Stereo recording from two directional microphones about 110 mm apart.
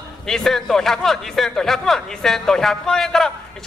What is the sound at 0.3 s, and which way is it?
A man's voice, 5° left (ahead or behind).